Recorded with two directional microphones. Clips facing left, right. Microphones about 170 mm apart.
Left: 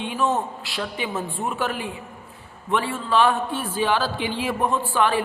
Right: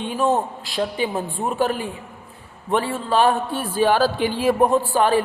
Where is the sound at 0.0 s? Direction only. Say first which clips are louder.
Right 3 dB; 40° right (ahead or behind).